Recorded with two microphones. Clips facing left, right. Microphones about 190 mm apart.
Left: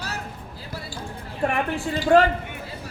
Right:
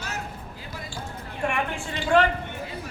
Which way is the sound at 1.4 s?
40° left (ahead or behind).